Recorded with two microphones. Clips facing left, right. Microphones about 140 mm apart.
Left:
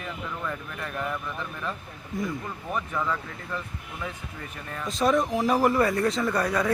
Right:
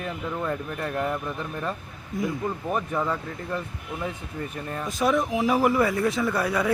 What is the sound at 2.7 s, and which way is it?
Speech, 30° right (ahead or behind).